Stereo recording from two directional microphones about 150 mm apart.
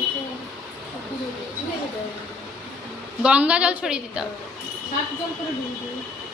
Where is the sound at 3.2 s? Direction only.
10° right (ahead or behind).